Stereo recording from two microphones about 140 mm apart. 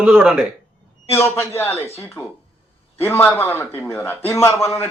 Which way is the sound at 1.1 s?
20° left (ahead or behind).